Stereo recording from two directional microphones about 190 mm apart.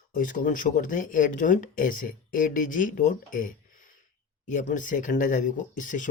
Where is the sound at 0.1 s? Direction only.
45° left (ahead or behind).